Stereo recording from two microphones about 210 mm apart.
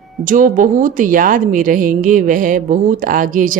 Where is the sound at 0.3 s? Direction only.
40° right (ahead or behind).